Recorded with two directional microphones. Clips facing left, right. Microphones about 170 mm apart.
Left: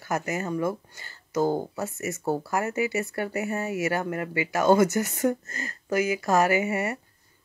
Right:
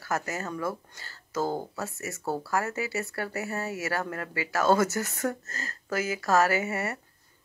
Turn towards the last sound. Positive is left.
turn(degrees=15)  # may be behind; listen again after turning